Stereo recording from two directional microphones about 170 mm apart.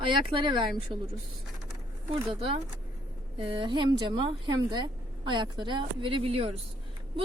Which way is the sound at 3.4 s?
30° right (ahead or behind).